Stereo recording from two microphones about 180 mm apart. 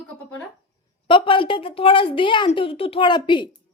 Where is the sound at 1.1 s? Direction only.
30° left (ahead or behind).